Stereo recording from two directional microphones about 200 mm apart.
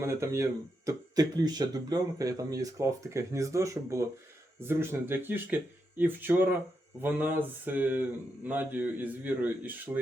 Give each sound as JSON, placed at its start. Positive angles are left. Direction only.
{"t": 0.0, "sound": "speech", "side_deg": -15}